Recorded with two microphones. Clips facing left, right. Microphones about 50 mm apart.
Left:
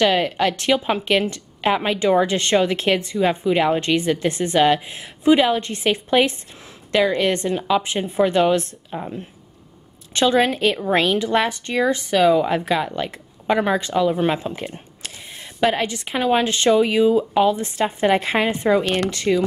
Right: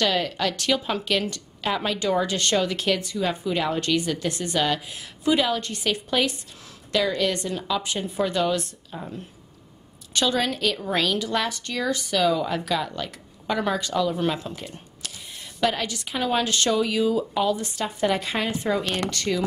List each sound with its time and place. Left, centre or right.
0.0 s a woman's voice: left